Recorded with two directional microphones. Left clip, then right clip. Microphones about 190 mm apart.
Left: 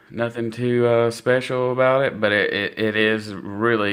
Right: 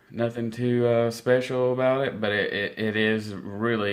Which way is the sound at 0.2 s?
30° left (ahead or behind).